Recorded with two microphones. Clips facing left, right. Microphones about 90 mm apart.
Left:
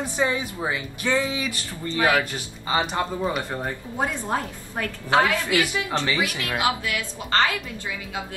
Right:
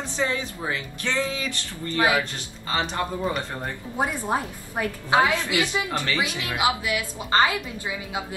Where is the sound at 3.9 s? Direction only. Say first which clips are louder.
Right 1 dB; 15° right (ahead or behind).